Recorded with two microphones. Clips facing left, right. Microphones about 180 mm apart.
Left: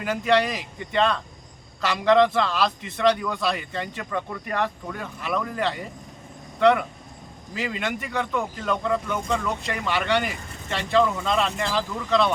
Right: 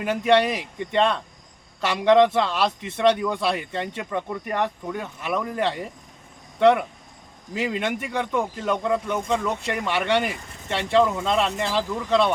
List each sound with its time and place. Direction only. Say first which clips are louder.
0.0 s a man's voice: right 2 dB; 25° right (ahead or behind)